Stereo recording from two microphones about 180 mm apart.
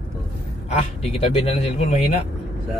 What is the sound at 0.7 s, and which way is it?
Speech, 35° left (ahead or behind).